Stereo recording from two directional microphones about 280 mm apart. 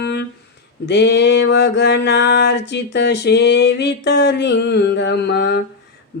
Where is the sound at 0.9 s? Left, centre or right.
Left.